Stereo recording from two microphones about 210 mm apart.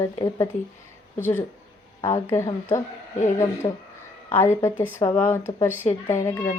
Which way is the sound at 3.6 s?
20° left (ahead or behind).